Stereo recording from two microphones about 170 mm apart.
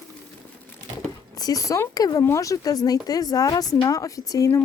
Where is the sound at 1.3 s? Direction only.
20° left (ahead or behind).